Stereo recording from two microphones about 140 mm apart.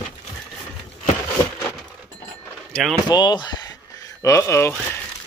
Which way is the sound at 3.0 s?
30° left (ahead or behind).